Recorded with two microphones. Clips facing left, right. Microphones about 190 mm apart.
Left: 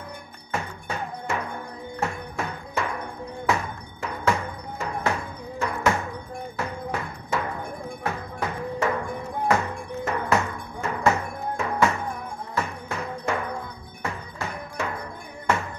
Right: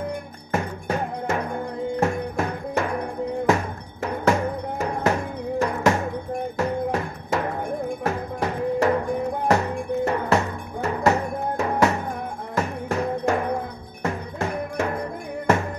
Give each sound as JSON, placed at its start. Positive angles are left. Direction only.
{"t": 0.5, "sound": "music", "side_deg": -45}
{"t": 14.0, "sound": "cowbell", "side_deg": -45}